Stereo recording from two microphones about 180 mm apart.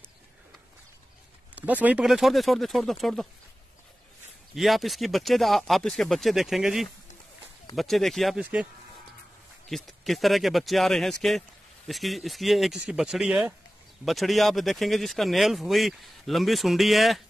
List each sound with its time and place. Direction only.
1.5 s speech: 10° right (ahead or behind)
4.6 s speech: centre (ahead or behind)
9.7 s speech: centre (ahead or behind)